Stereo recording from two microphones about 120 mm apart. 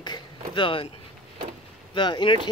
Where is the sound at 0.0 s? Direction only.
40° left (ahead or behind).